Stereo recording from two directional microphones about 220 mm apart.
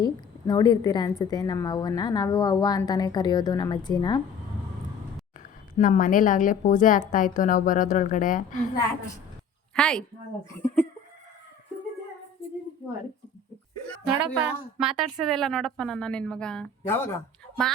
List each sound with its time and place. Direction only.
0.0 s a woman's voice: 20° left (ahead or behind)
5.4 s a woman's voice: 35° left (ahead or behind)
9.7 s a woman's voice: 5° left (ahead or behind)
14.2 s a woman's voice: 5° right (ahead or behind)